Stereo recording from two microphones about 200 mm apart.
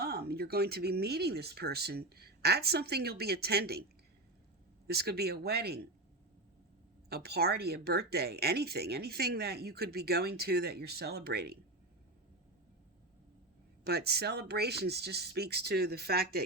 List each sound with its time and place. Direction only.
0.0 s speech: 55° right (ahead or behind)
4.9 s speech: 55° right (ahead or behind)
7.1 s speech: 50° right (ahead or behind)
13.8 s speech: 55° right (ahead or behind)